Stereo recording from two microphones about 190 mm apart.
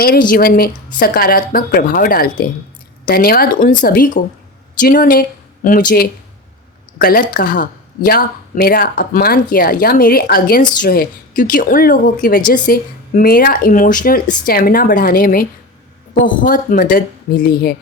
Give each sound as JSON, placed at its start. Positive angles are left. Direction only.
{"t": 0.0, "sound": "speech", "side_deg": 50}